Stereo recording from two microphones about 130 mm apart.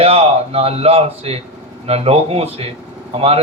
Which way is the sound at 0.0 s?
50° right (ahead or behind).